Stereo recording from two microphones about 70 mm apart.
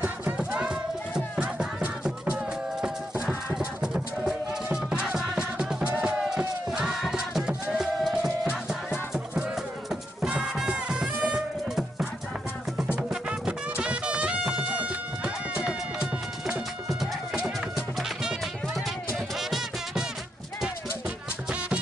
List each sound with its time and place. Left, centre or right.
0.4 s clip-clop: centre
1.4 s music: centre
3.5 s music: centre
5.9 s music: right
6.1 s music: centre
10.3 s music: centre
19.1 s music: centre